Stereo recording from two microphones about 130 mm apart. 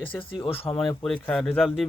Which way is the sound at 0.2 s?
40° left (ahead or behind).